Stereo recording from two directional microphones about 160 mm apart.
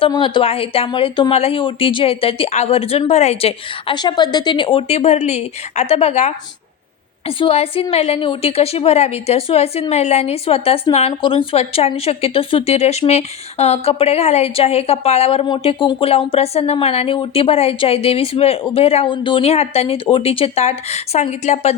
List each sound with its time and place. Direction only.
0.0 s speech: 30° left (ahead or behind)